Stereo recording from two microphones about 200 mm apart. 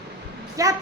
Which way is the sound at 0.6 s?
15° right (ahead or behind).